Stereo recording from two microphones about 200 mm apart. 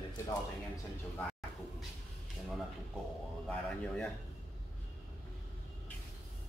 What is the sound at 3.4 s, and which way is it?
Speech, 5° left (ahead or behind).